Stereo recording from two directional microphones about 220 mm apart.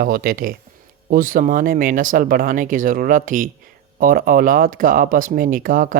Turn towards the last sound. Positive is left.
turn(degrees=-40)  # may be behind; listen again after turning